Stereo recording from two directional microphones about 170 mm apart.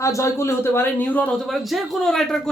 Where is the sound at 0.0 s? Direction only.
20° left (ahead or behind).